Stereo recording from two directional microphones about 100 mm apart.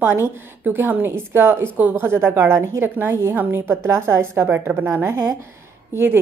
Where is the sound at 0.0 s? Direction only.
20° right (ahead or behind).